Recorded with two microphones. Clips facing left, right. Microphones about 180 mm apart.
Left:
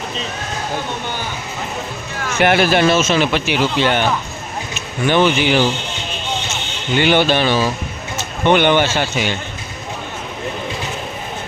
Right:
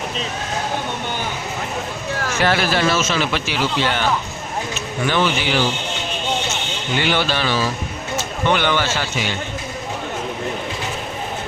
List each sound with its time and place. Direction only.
2.4 s speech: 20° left (ahead or behind)
5.0 s speech: 20° left (ahead or behind)
7.0 s speech: 20° left (ahead or behind)